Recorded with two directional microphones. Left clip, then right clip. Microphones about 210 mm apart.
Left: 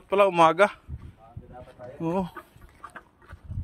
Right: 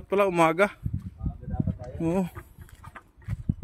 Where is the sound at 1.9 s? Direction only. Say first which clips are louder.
Even; 40° right (ahead or behind).